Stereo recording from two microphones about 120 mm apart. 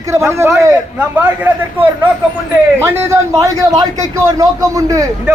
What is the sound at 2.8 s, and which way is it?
A man's voice, 20° right (ahead or behind).